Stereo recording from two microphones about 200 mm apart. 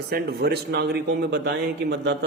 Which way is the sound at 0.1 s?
50° right (ahead or behind).